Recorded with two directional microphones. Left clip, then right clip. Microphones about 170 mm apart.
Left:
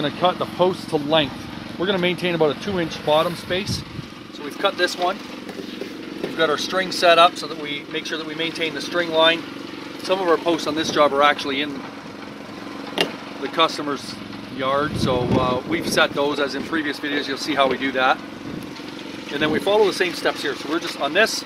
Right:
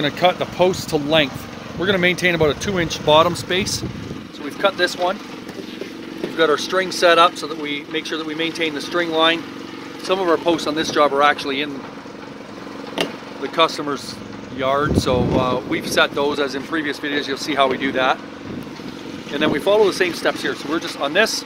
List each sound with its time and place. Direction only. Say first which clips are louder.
0.0 s speech: right 3 dB; 25° right (ahead or behind)
6.3 s speech: right 3 dB; 25° right (ahead or behind)
12.9 s vehicle: left 1 dB; 15° right (ahead or behind)
14.6 s speech: right 3 dB; 15° right (ahead or behind)
19.3 s speech: right 2 dB; 25° right (ahead or behind)